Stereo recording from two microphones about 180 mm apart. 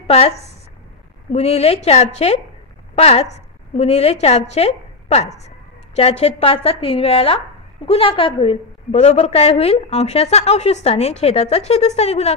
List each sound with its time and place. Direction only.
0.0 s a woman's voice: 35° left (ahead or behind)